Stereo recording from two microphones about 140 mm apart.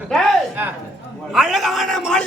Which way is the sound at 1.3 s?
Centre (ahead or behind).